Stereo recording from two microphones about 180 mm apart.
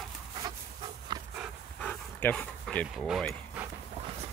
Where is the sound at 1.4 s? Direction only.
5° left (ahead or behind).